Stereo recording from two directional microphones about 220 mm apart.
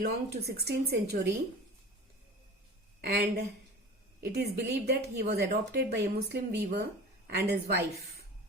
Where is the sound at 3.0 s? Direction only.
45° right (ahead or behind).